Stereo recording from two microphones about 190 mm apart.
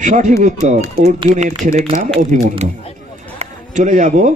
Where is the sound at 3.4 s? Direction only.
40° right (ahead or behind).